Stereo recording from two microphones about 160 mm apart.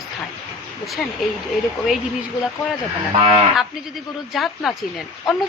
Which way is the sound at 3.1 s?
40° right (ahead or behind).